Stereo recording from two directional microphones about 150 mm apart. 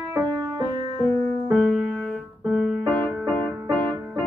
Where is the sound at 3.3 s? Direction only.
10° left (ahead or behind).